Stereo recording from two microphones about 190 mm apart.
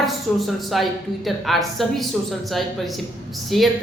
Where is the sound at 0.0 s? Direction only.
Centre (ahead or behind).